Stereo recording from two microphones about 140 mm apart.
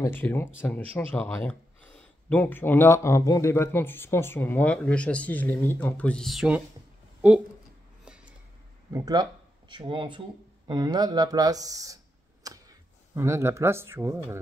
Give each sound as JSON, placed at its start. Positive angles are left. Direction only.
{"t": 0.0, "sound": "speech", "side_deg": 15}
{"t": 8.0, "sound": "a sound", "side_deg": -5}
{"t": 8.9, "sound": "speech", "side_deg": -25}